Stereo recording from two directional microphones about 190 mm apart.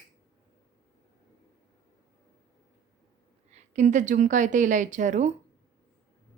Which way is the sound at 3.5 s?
40° right (ahead or behind).